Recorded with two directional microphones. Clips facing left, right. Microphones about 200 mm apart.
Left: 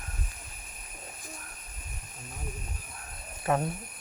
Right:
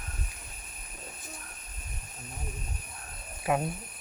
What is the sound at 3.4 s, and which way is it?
Speech, 10° right (ahead or behind).